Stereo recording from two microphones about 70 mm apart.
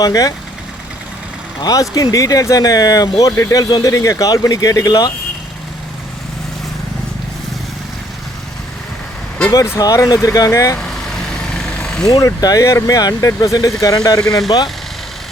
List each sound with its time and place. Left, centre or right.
0.0 s speech: left
1.6 s speech: left
9.8 s speech: left
11.5 s vehicle: centre
12.4 s speech: left
14.2 s speech: centre